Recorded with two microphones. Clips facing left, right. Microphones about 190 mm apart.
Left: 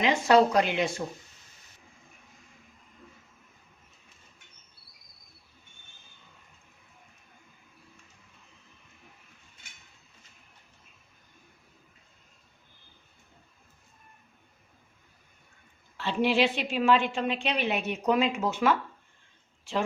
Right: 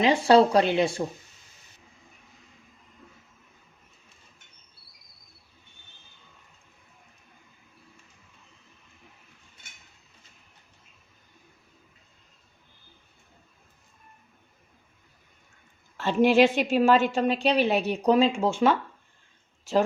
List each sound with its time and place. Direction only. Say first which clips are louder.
0.0 s a woman's voice: right 3 dB; 35° right (ahead or behind)
16.0 s a woman's voice: right 6 dB; 45° right (ahead or behind); by 18.8 s 30° right (ahead or behind)
19.7 s a woman's voice: right 7 dB; 40° right (ahead or behind)